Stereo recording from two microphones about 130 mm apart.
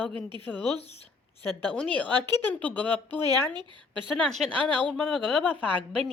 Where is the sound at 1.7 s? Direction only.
10° left (ahead or behind).